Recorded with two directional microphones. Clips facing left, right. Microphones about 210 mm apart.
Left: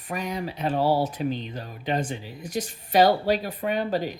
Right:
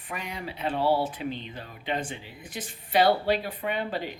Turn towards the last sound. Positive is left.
turn(degrees=40)  # may be behind; listen again after turning